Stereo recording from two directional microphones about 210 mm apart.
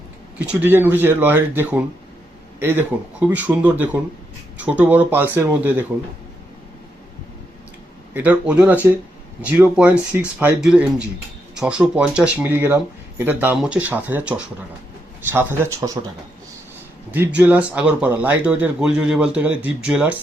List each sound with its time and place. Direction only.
0.3 s speech: 10° right (ahead or behind)
8.1 s speech: 5° right (ahead or behind)
17.1 s speech: 10° right (ahead or behind)